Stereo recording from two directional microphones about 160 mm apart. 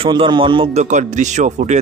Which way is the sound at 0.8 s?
50° right (ahead or behind).